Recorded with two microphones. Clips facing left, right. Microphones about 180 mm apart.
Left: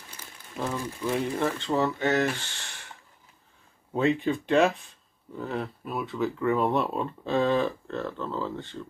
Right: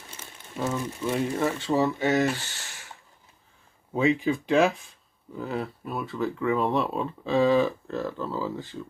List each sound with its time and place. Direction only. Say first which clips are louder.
1.0 s speech: right 1 dB; centre (ahead or behind)
3.9 s speech: right 1 dB; centre (ahead or behind)